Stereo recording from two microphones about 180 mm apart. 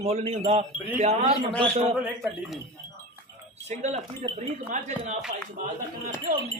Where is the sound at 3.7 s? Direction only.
40° right (ahead or behind).